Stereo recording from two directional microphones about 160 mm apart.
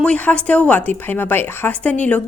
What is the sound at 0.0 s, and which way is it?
A woman's voice, 5° left (ahead or behind).